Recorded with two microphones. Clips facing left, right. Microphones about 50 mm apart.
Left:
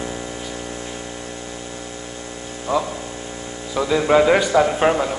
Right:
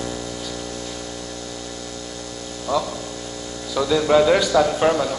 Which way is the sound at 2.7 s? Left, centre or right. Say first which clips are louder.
Left 1 dB; left.